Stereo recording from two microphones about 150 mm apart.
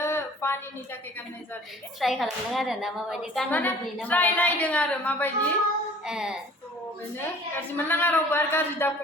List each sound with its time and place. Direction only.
0.0 s a sound: 15° left (ahead or behind)
2.0 s a woman's voice: centre (ahead or behind)
3.5 s a woman's voice: 10° left (ahead or behind)
6.1 s a woman's voice: 5° right (ahead or behind)
7.2 s a woman's voice: 15° left (ahead or behind)